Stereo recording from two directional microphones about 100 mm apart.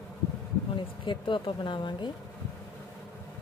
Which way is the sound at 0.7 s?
55° left (ahead or behind).